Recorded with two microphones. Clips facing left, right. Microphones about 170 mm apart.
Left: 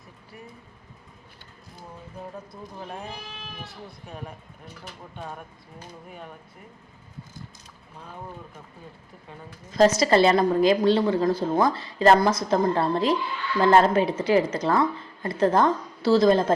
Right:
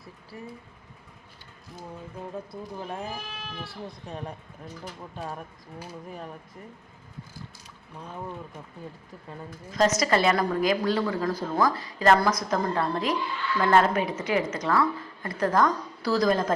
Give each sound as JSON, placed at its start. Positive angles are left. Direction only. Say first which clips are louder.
{"t": 9.7, "sound": "a woman's voice", "louder": "left 5 dB", "side_deg": 30}